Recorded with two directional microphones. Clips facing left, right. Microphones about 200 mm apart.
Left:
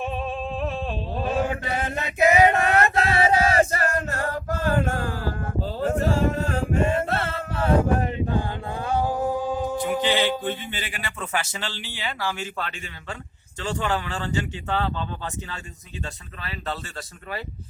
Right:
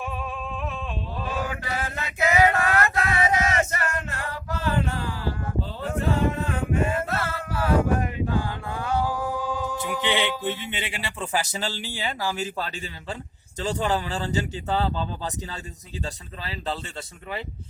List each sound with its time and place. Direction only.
0.0 s chant: 25° left (ahead or behind)
10.7 s speech: 25° right (ahead or behind)
16.4 s speech: 30° right (ahead or behind)